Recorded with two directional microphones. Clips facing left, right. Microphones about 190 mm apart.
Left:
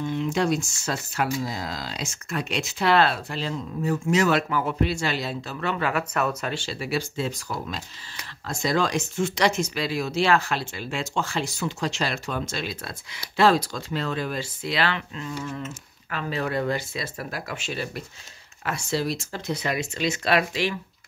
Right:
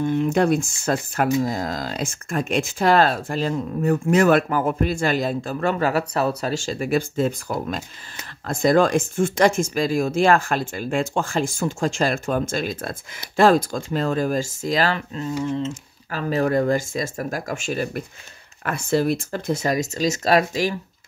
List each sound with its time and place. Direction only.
0.0 s speech: 50° right (ahead or behind)
15.4 s speech: 25° right (ahead or behind)